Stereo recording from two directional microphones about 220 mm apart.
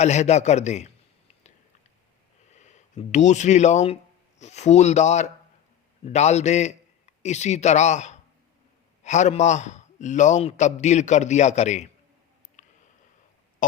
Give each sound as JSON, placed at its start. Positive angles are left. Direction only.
{"t": 0.0, "sound": "a man's voice", "side_deg": 30}
{"t": 2.5, "sound": "a man's voice", "side_deg": 30}
{"t": 12.6, "sound": "a sound", "side_deg": 35}